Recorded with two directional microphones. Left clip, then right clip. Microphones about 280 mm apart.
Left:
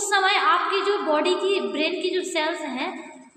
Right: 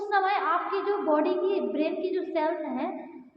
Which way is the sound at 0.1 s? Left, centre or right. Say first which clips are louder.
Left 6 dB; left.